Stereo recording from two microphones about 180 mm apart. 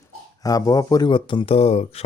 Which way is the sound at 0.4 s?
20° left (ahead or behind).